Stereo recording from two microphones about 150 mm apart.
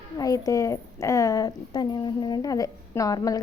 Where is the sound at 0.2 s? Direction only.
25° left (ahead or behind).